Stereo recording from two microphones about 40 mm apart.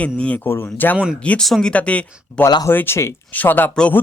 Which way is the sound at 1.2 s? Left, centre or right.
Left.